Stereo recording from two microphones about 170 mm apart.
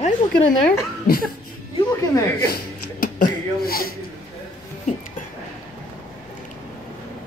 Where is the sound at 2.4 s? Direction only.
60° left (ahead or behind).